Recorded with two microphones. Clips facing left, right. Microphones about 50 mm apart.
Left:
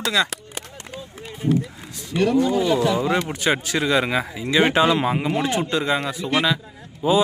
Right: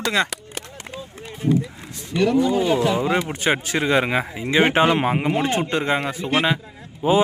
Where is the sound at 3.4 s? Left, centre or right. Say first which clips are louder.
Even; right.